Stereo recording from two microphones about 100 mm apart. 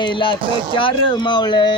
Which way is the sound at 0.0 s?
55° left (ahead or behind).